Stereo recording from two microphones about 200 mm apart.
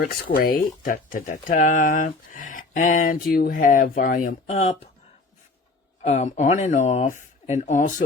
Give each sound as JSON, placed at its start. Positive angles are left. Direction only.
{"t": 0.0, "sound": "speech", "side_deg": 45}
{"t": 6.0, "sound": "speech", "side_deg": 35}